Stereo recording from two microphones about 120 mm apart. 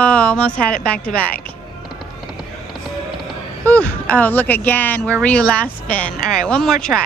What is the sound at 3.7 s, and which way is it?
Speech, 15° left (ahead or behind).